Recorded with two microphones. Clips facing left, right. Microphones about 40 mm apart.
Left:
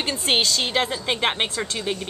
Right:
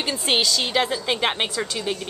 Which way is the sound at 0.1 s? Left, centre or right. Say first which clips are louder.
Even; centre.